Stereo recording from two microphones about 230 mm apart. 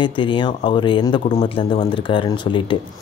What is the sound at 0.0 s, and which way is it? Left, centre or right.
Speech, left.